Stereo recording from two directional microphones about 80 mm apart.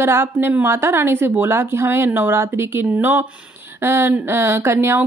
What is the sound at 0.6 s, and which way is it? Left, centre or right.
A woman's voice, right.